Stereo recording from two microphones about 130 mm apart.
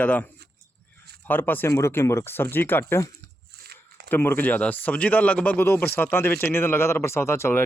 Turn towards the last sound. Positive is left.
turn(degrees=20)  # may be behind; listen again after turning